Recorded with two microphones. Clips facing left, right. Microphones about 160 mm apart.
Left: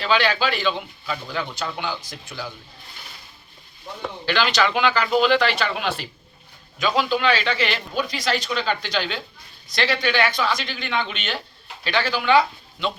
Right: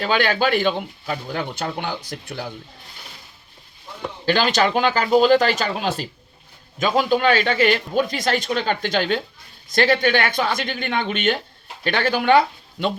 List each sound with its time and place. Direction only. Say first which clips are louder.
0.0 s speech: right 2 dB; 50° right (ahead or behind)
4.3 s speech: right 3 dB; 45° right (ahead or behind)